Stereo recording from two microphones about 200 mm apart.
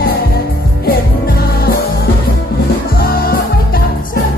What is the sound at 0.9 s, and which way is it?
Music, 50° left (ahead or behind).